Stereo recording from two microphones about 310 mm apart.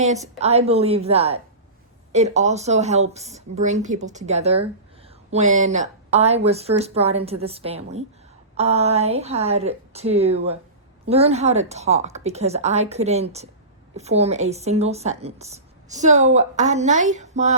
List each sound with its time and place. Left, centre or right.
0.0 s a woman's voice: right